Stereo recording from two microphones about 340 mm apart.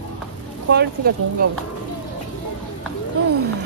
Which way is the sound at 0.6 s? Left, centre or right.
Right.